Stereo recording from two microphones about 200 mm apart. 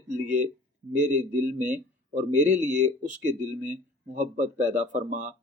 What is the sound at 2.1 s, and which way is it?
Speech, 35° right (ahead or behind).